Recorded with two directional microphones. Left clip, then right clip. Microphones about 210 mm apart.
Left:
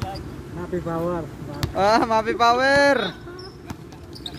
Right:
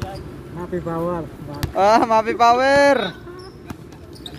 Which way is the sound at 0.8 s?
40° right (ahead or behind).